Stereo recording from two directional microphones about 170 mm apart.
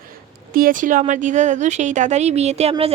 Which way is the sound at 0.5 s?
55° right (ahead or behind).